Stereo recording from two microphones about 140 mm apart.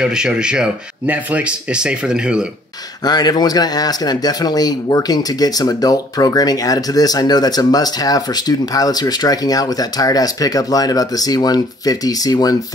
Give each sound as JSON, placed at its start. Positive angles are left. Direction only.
{"t": 0.0, "sound": "speech", "side_deg": -5}
{"t": 3.0, "sound": "speech", "side_deg": 30}